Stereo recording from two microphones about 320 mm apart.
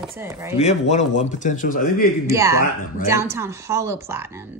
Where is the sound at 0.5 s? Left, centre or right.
Centre.